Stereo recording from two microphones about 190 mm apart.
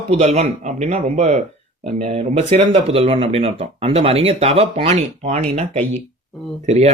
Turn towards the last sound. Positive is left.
turn(degrees=-35)  # may be behind; listen again after turning